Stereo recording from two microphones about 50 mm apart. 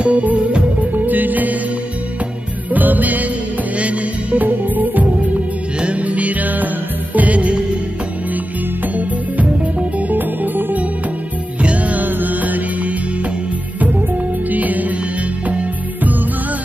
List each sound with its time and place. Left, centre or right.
0.0 s music: right
0.9 s music: right
2.7 s music: right
8.9 s music: right
14.5 s music: right